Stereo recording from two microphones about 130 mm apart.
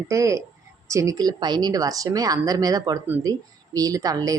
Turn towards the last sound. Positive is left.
turn(degrees=-25)  # may be behind; listen again after turning